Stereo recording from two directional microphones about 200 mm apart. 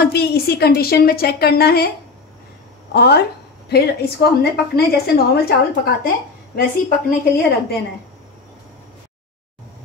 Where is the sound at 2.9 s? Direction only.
55° left (ahead or behind).